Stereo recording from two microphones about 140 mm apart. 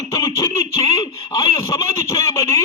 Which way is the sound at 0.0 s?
25° left (ahead or behind).